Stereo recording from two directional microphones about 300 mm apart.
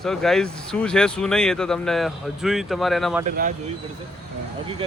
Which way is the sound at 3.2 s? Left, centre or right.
Right.